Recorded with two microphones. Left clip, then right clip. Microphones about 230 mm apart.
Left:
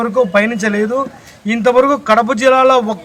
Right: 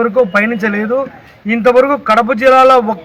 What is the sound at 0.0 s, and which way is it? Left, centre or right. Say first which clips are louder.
A man's voice: right 2 dB; centre.